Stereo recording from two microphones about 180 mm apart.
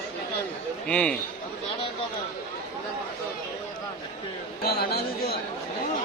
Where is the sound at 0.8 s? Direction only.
5° left (ahead or behind).